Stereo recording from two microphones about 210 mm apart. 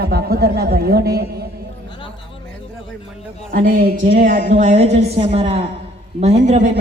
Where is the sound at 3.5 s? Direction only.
40° right (ahead or behind).